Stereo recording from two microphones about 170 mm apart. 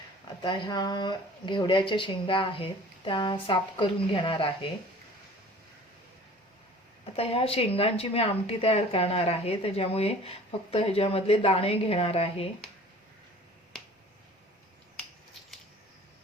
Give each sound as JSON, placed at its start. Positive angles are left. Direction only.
{"t": 0.4, "sound": "speech", "side_deg": 25}
{"t": 7.0, "sound": "speech", "side_deg": 35}